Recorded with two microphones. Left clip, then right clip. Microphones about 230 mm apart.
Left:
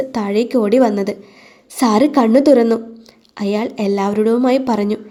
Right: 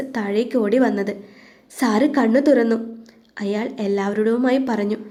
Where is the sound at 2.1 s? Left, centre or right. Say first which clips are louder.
Left 5 dB; left.